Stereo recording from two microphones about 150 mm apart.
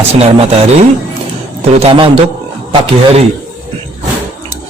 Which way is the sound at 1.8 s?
40° right (ahead or behind).